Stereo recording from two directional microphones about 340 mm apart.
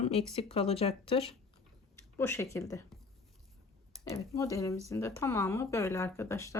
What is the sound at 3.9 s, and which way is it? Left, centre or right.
Speech, centre.